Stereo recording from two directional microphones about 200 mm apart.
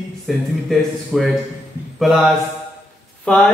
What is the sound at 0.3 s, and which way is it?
A man's voice, centre (ahead or behind).